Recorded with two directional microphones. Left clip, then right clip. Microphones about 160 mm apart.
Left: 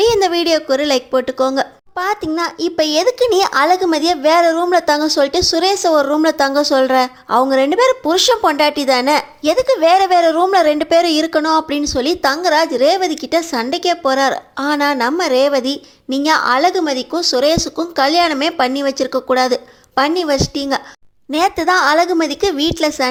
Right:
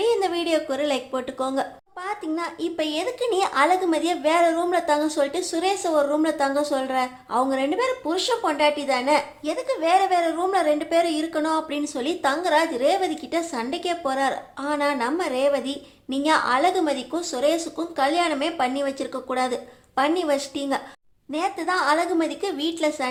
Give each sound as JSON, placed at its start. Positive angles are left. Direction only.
{"t": 0.0, "sound": "a woman's voice", "side_deg": 40}